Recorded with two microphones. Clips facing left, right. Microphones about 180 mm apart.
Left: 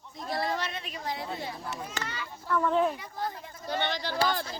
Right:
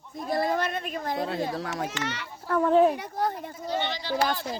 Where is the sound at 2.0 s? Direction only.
75° right (ahead or behind).